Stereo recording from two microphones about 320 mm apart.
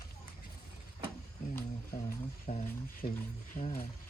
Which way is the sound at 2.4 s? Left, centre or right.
Left.